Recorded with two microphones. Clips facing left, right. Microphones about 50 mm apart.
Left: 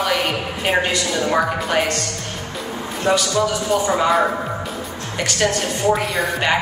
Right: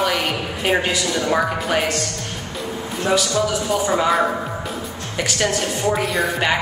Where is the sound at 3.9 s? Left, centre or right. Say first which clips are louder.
Even; centre.